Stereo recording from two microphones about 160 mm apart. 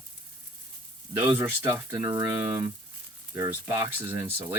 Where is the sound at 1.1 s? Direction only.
15° right (ahead or behind).